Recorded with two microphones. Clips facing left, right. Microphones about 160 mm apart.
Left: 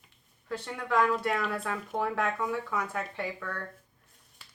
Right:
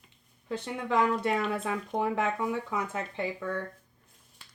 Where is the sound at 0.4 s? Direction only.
20° right (ahead or behind).